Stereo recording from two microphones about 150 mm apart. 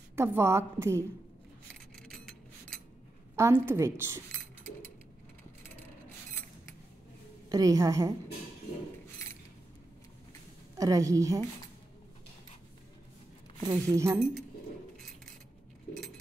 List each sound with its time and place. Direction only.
0.1 s a woman's voice: 15° right (ahead or behind)
2.0 s a sound: 5° left (ahead or behind)
3.3 s a woman's voice: 15° right (ahead or behind)
7.4 s a woman's voice: 25° right (ahead or behind)
10.8 s a woman's voice: 20° right (ahead or behind)
13.7 s a woman's voice: 20° right (ahead or behind)